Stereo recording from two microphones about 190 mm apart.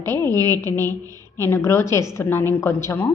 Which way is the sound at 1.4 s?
10° left (ahead or behind).